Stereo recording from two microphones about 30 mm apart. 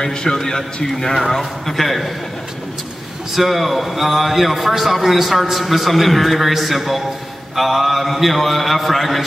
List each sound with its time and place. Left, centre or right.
0.0 s a man's voice: left; by 2.0 s centre
3.3 s a man's voice: centre